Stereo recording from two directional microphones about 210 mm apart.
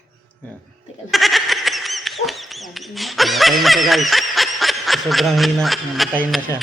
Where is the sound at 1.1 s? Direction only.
Centre (ahead or behind).